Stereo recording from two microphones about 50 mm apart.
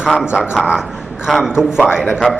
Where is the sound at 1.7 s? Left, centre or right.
Centre.